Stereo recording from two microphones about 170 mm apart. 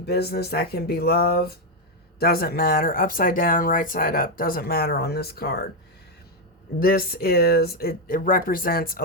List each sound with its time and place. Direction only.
0.0 s speech: 70° left (ahead or behind)
6.7 s speech: 60° left (ahead or behind)